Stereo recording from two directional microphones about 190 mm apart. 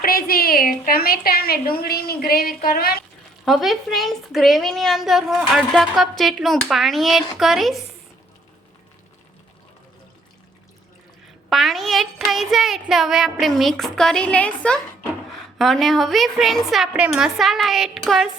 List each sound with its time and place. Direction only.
0.0 s a woman's voice: 50° left (ahead or behind)
3.4 s a woman's voice: centre (ahead or behind)
11.4 s a woman's voice: centre (ahead or behind)